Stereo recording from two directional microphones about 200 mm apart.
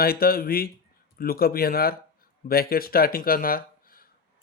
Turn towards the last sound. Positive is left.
turn(degrees=45)  # may be behind; listen again after turning